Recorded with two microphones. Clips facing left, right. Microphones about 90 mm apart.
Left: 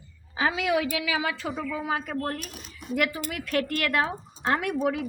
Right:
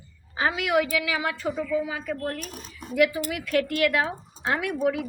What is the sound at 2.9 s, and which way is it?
A woman's voice, 45° left (ahead or behind).